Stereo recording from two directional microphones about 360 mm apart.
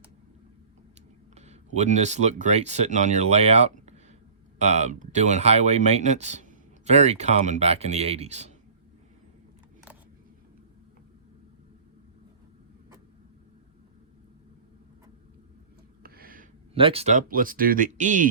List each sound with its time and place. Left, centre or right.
1.4 s speech: centre
16.0 s speech: right